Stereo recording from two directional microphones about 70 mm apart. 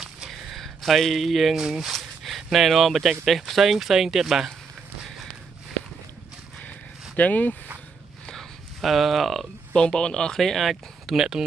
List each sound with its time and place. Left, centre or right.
0.5 s speech: centre
5.0 s walk: centre
7.2 s speech: left
8.3 s a sound: centre
9.8 s speech: centre